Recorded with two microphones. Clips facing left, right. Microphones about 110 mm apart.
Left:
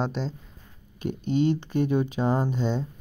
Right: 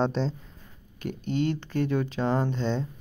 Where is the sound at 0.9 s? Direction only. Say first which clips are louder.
Left 3 dB; 15° left (ahead or behind).